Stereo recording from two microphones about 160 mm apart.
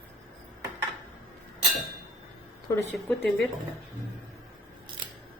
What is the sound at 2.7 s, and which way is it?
Speech, 20° left (ahead or behind).